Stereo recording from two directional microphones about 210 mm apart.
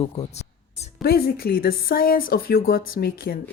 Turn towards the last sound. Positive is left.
turn(degrees=45)  # may be behind; listen again after turning